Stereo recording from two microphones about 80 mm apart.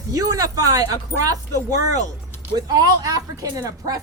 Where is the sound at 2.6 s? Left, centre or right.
Right.